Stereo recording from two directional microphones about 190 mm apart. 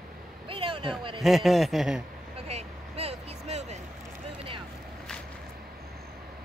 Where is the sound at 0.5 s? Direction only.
30° right (ahead or behind).